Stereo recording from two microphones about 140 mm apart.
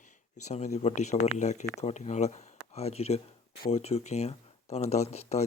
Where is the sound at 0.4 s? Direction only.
55° left (ahead or behind).